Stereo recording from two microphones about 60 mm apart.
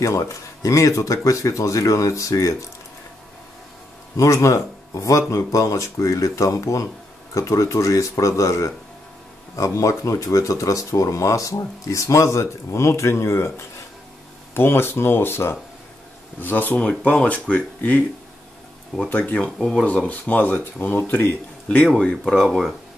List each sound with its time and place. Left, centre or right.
0.0 s speech: left
4.2 s speech: left
14.5 s speech: left
16.3 s speech: left
19.0 s speech: left
22.2 s speech: centre